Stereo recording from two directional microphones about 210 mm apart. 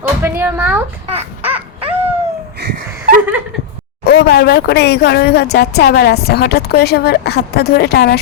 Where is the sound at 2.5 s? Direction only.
50° right (ahead or behind).